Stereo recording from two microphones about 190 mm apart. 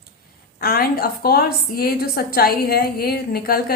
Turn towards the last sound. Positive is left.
turn(degrees=55)  # may be behind; listen again after turning